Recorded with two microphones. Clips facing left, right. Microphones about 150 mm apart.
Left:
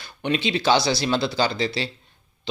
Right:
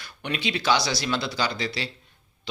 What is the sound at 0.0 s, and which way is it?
Speech, 25° left (ahead or behind).